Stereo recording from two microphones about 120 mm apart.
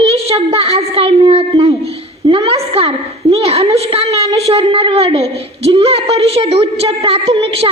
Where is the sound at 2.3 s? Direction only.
50° right (ahead or behind).